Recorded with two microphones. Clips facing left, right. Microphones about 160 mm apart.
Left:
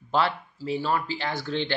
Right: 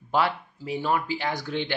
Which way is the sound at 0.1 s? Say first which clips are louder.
Even; 15° right (ahead or behind).